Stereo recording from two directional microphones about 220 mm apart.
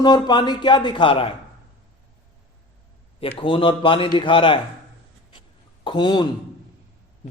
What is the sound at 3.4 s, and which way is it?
A man's voice, 20° left (ahead or behind).